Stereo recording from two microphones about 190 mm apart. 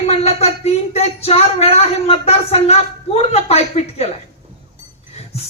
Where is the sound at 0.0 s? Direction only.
35° left (ahead or behind).